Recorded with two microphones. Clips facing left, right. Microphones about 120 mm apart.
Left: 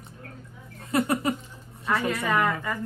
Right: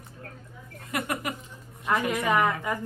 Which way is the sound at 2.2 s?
15° right (ahead or behind).